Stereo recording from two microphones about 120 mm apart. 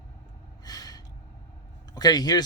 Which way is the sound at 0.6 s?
30° left (ahead or behind).